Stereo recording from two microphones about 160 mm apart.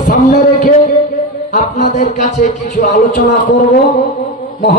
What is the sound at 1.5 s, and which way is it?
Music, 50° left (ahead or behind).